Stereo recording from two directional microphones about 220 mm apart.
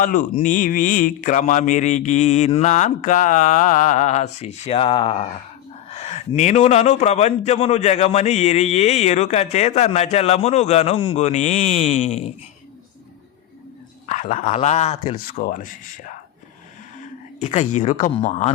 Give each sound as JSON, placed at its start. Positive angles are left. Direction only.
{"t": 0.0, "sound": "a man's voice", "side_deg": 40}
{"t": 14.1, "sound": "speech", "side_deg": 35}
{"t": 17.4, "sound": "speech", "side_deg": 30}